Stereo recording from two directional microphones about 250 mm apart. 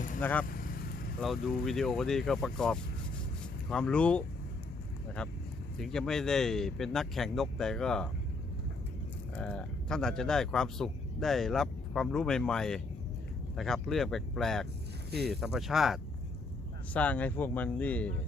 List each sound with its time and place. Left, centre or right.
0.2 s speech: centre
0.4 s vehicle: left
1.2 s speech: centre
5.7 s speech: centre
9.3 s speech: centre